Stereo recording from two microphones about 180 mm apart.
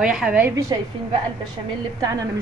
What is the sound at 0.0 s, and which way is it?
Speech, 5° right (ahead or behind).